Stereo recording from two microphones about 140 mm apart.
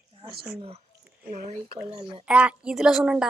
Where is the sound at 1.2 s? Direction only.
60° right (ahead or behind).